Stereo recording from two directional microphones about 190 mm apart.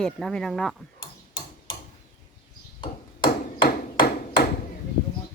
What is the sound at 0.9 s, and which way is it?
Tick-tock, 25° left (ahead or behind).